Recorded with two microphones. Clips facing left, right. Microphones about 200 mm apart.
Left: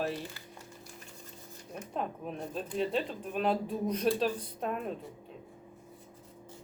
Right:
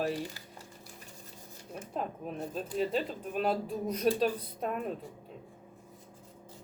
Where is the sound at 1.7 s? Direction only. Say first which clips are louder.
Even; 5° right (ahead or behind).